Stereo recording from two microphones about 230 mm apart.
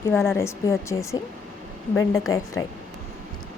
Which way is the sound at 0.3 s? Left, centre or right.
Centre.